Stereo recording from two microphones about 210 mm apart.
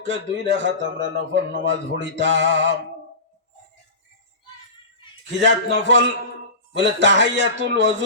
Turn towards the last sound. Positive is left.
turn(degrees=-60)  # may be behind; listen again after turning